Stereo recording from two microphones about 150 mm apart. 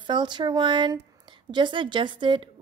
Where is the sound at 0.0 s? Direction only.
30° right (ahead or behind).